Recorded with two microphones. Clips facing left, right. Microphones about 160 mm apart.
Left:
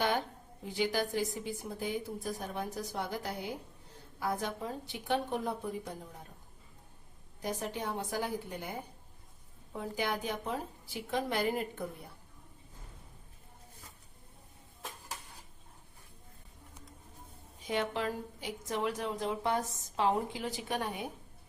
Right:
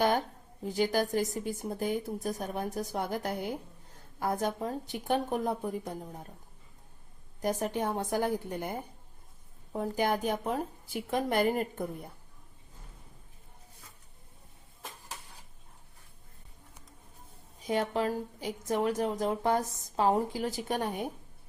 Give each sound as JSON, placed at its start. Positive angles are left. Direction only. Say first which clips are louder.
{"t": 0.7, "sound": "a woman's voice", "louder": "right 4 dB", "side_deg": -45}
{"t": 7.4, "sound": "a woman's voice", "louder": "right 6 dB", "side_deg": -50}
{"t": 9.7, "sound": "a woman's voice", "louder": "right 6 dB", "side_deg": -50}
{"t": 17.7, "sound": "a woman's voice", "louder": "right 4 dB", "side_deg": -40}